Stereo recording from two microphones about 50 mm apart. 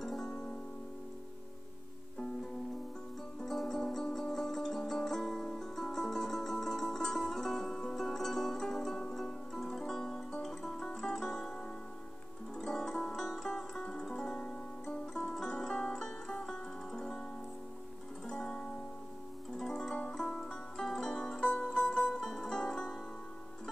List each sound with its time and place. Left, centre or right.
0.0 s music: centre
0.3 s music: centre
3.4 s music: centre
18.2 s music: centre
22.1 s music: centre